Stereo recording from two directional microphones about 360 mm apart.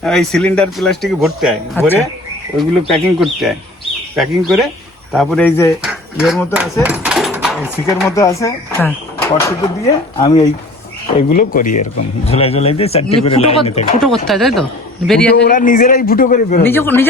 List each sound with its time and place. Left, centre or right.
0.0 s speech: centre
6.8 s a sound: centre
7.9 s speech: centre
11.2 s speech: left
14.0 s speech: centre
15.4 s a man's voice: left
16.6 s speech: centre